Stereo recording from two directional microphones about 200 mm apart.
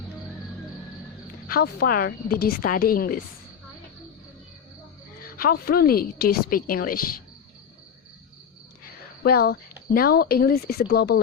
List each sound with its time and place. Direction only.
1.5 s a woman's voice: 50° left (ahead or behind)
5.2 s a woman's voice: 45° left (ahead or behind)
8.8 s a woman's voice: 50° left (ahead or behind)